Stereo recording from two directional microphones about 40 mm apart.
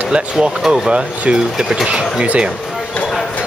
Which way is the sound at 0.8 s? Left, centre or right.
Right.